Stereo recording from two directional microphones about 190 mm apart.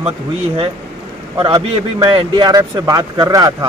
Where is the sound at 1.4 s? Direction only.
25° right (ahead or behind).